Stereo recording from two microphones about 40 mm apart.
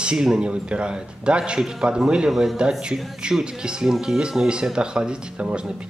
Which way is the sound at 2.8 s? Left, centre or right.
Right.